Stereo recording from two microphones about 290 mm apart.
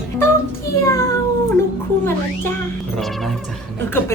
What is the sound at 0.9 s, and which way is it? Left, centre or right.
Cat, centre.